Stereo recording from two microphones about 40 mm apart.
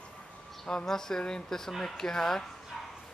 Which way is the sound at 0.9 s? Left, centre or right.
Centre.